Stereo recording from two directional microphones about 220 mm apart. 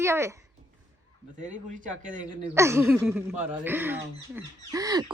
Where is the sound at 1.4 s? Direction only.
35° right (ahead or behind).